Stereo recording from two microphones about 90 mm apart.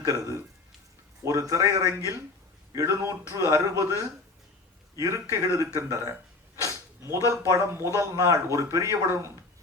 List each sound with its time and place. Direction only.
0.0 s a man's voice: 40° right (ahead or behind)
6.6 s a sound: 35° right (ahead or behind)
7.3 s a man's voice: 35° right (ahead or behind)